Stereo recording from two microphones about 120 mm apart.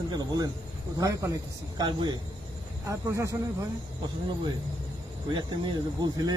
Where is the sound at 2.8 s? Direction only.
25° right (ahead or behind).